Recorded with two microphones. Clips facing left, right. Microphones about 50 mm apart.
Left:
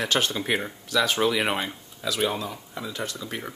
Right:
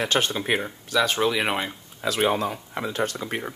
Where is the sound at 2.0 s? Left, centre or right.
Right.